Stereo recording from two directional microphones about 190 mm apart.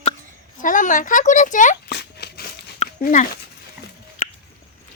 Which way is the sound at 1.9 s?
60° left (ahead or behind).